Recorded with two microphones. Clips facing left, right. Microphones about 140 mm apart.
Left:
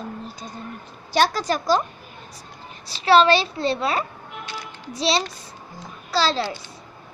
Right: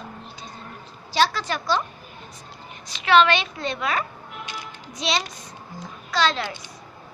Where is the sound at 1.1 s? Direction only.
45° left (ahead or behind).